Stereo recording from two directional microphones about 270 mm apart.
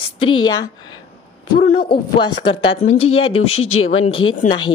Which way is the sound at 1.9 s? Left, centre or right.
Centre.